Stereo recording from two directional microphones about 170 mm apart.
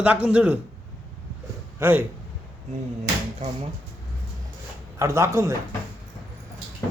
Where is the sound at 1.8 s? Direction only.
10° right (ahead or behind).